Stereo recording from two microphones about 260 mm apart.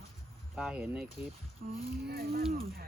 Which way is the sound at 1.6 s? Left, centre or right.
Right.